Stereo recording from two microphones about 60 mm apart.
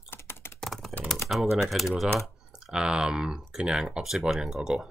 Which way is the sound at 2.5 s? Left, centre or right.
Centre.